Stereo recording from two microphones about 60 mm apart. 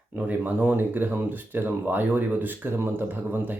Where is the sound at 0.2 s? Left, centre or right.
Right.